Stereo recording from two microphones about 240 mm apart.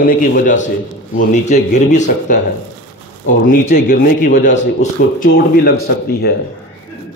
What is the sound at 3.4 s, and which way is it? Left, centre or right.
A man's voice, left.